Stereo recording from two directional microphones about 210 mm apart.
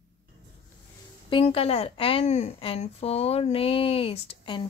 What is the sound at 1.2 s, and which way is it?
A woman's voice, 25° left (ahead or behind).